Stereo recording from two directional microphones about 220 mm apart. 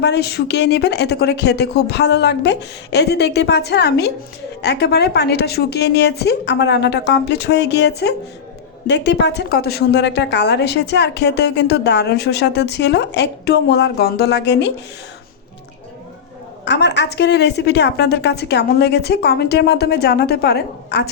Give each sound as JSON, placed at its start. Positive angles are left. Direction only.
{"t": 0.0, "sound": "a woman's voice", "side_deg": 50}
{"t": 16.6, "sound": "a woman's voice", "side_deg": 50}